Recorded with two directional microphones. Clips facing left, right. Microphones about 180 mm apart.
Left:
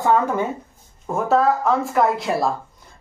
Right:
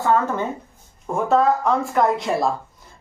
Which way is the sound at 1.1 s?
Centre (ahead or behind).